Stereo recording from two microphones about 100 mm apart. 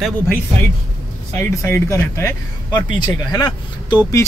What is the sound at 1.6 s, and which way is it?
Speech, 25° left (ahead or behind).